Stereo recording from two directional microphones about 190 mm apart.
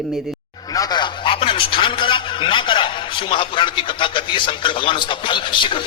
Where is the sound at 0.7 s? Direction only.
20° left (ahead or behind).